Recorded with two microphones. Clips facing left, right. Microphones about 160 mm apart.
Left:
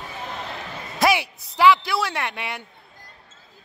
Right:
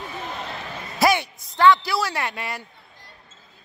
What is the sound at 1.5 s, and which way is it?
A man's voice, 5° left (ahead or behind).